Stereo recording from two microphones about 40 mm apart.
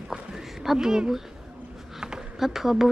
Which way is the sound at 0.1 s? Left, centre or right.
Centre.